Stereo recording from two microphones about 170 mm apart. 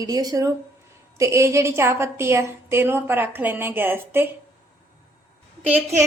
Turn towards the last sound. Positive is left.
turn(degrees=-10)  # may be behind; listen again after turning